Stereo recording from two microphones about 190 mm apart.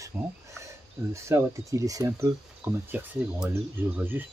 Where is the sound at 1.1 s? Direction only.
15° right (ahead or behind).